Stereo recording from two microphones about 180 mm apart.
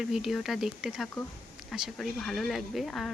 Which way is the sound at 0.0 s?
Centre (ahead or behind).